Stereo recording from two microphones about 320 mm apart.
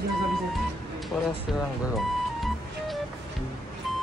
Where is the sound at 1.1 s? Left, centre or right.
Centre.